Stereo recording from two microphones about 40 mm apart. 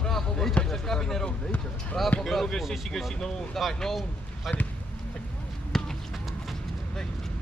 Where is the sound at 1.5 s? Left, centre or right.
Left.